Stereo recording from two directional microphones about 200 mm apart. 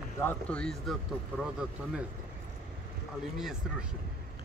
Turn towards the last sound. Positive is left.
turn(degrees=-5)  # may be behind; listen again after turning